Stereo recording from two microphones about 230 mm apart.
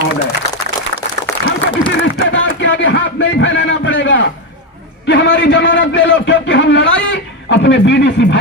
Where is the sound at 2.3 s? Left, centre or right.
Left.